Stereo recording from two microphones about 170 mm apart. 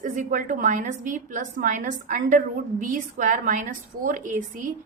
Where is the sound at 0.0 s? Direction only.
50° right (ahead or behind).